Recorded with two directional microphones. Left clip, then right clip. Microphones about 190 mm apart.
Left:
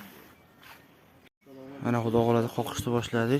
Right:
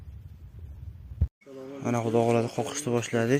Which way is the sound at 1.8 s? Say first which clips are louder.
Right 1 dB; 20° left (ahead or behind).